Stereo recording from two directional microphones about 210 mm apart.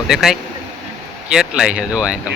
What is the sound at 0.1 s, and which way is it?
Speech, centre (ahead or behind).